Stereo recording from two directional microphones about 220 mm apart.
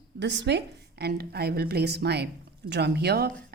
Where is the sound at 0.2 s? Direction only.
55° right (ahead or behind).